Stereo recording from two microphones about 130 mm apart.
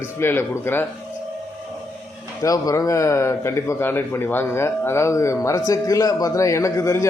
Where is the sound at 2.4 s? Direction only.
25° left (ahead or behind).